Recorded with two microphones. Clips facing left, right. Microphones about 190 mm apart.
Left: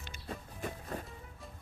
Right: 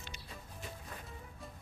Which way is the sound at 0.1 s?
50° left (ahead or behind).